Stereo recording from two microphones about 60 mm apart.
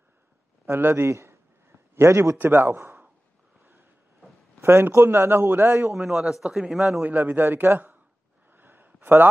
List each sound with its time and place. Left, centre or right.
0.7 s a man's voice: right
2.3 s a man's voice: right
4.6 s a man's voice: right
5.9 s speech: centre
7.0 s a man's voice: right
8.5 s a sound: right